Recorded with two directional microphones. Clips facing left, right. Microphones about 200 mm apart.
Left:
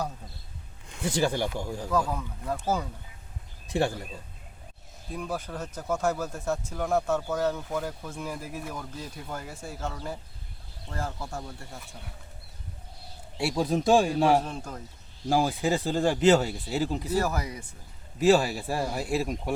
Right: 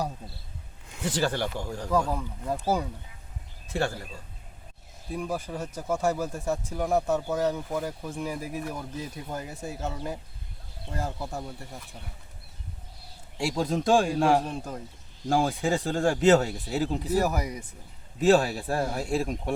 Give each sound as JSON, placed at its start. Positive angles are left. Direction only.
{"t": 1.0, "sound": "speech", "side_deg": 10}
{"t": 1.9, "sound": "speech", "side_deg": -10}
{"t": 3.7, "sound": "speech", "side_deg": 15}
{"t": 5.1, "sound": "speech", "side_deg": -10}
{"t": 13.4, "sound": "speech", "side_deg": 5}
{"t": 17.1, "sound": "speech", "side_deg": -15}
{"t": 18.2, "sound": "speech", "side_deg": 0}